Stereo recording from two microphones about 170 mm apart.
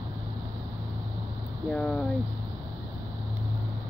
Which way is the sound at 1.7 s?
5° left (ahead or behind).